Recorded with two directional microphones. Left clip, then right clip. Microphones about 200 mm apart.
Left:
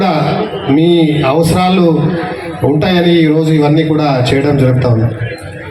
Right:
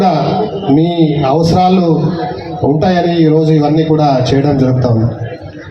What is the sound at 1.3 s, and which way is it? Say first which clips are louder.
A man's voice: right 1 dB; 50° right (ahead or behind).